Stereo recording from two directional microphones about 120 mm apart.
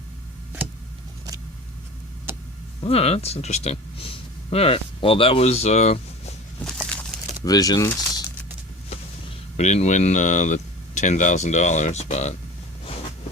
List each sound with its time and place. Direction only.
2.8 s speech: 55° left (ahead or behind)
6.7 s a sound: centre (ahead or behind)
7.4 s speech: 30° left (ahead or behind)
7.9 s crumpling: 30° left (ahead or behind)
9.6 s speech: 70° left (ahead or behind)